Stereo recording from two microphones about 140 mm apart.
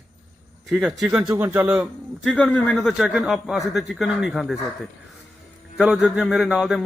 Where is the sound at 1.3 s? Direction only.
15° right (ahead or behind).